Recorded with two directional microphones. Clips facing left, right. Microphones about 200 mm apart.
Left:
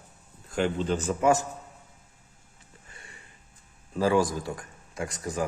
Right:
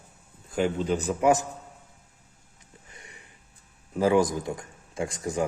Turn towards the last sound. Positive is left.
turn(degrees=-25)  # may be behind; listen again after turning